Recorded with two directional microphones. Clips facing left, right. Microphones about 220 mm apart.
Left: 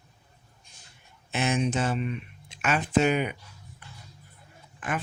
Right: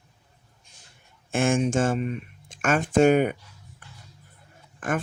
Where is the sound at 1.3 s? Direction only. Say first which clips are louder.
Right 4 dB; 50° right (ahead or behind).